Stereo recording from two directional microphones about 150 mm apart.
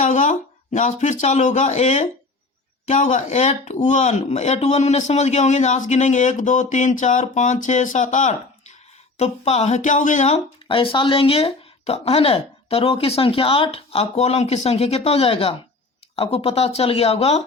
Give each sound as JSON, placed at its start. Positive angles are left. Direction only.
{"t": 0.0, "sound": "speech", "side_deg": 55}
{"t": 10.8, "sound": "speech", "side_deg": 35}